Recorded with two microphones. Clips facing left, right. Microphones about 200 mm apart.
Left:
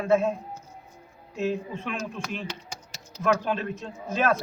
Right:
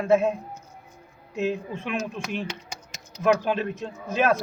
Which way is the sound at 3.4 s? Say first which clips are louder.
Right 3 dB; 5° right (ahead or behind).